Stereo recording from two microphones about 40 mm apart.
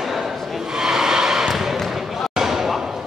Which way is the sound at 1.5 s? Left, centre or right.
Centre.